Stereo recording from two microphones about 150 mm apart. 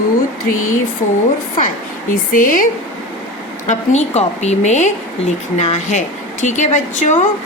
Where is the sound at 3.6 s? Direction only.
50° left (ahead or behind).